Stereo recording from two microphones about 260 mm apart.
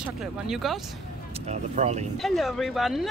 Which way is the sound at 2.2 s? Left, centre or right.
Centre.